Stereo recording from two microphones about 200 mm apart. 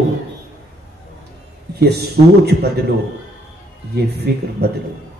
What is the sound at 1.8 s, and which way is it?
Speech, 55° right (ahead or behind).